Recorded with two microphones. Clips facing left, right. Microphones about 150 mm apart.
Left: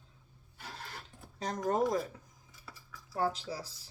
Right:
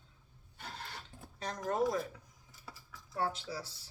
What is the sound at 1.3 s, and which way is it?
Speech, 40° left (ahead or behind).